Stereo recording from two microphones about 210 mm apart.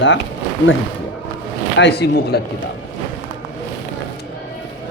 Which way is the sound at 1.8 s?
50° left (ahead or behind).